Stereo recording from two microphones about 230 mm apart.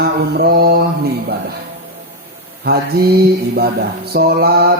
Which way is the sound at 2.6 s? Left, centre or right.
Right.